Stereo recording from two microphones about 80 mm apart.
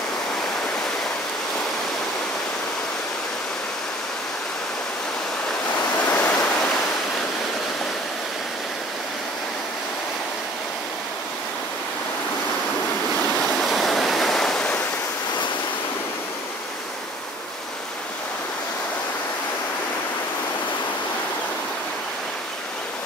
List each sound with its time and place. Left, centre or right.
6.0 s waves: left
13.4 s waves: centre